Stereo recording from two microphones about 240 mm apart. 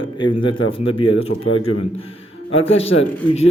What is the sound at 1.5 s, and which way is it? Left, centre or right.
Speech, left.